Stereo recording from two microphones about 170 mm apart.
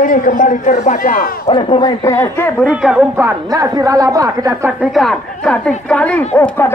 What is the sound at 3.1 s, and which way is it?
A woman's voice, 20° right (ahead or behind).